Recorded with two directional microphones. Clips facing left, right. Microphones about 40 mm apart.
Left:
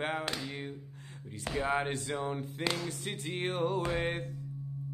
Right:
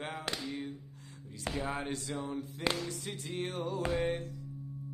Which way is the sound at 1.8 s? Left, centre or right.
Left.